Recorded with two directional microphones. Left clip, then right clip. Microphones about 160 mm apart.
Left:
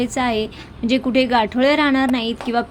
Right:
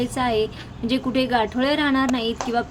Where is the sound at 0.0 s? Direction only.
20° left (ahead or behind).